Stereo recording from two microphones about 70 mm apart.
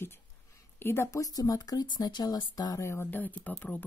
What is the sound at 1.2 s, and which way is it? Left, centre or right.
Speech, left.